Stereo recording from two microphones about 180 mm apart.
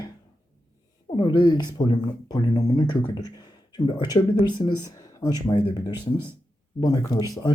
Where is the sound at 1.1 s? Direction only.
25° left (ahead or behind).